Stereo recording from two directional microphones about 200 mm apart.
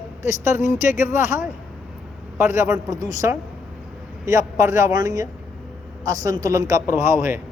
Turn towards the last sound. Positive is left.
turn(degrees=-10)  # may be behind; listen again after turning